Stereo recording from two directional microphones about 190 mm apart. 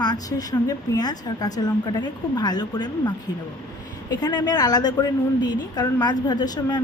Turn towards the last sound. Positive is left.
turn(degrees=20)  # may be behind; listen again after turning